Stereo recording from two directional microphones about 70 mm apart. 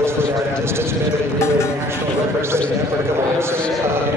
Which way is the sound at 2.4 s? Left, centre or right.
Right.